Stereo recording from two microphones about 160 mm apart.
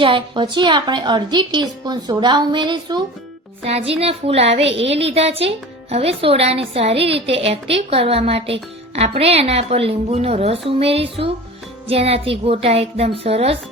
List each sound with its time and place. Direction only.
0.0 s a woman's voice: 30° right (ahead or behind)